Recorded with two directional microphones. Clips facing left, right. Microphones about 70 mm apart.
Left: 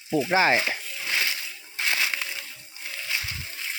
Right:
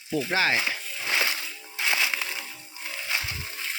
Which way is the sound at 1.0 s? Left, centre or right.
Right.